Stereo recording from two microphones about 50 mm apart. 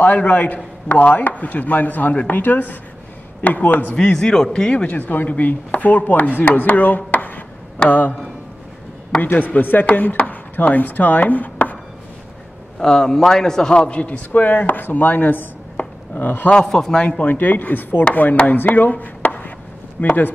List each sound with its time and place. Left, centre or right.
0.0 s chopping: left
3.9 s speech: centre; by 5.3 s left
5.3 s chopping: left
9.2 s chopping: left
12.7 s a man's voice: centre; by 15.4 s left
15.8 s dishes: left
16.2 s chopping: left
16.6 s speech: centre
17.2 s chopping: left